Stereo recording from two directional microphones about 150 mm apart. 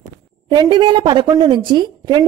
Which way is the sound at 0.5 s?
30° right (ahead or behind).